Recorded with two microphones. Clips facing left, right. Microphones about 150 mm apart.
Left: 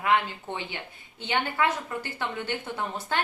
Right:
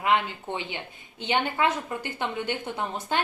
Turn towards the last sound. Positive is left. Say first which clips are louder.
# right 1 dB
turn(degrees=-20)  # may be behind; listen again after turning